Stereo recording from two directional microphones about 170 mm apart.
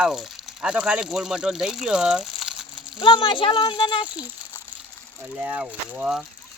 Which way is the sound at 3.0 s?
30° left (ahead or behind).